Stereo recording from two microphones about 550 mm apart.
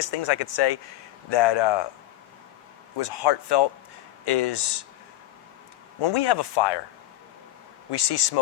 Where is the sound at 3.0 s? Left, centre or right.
Left.